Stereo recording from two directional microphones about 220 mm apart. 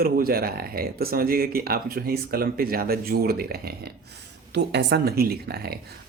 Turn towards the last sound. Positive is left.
turn(degrees=-45)  # may be behind; listen again after turning